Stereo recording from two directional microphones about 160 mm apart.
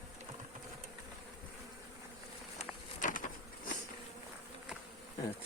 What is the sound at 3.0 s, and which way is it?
Bee, 55° left (ahead or behind).